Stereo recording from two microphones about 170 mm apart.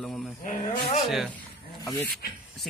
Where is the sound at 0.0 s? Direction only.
Centre (ahead or behind).